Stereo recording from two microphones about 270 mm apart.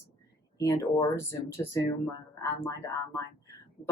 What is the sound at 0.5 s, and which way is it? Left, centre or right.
Speech, centre.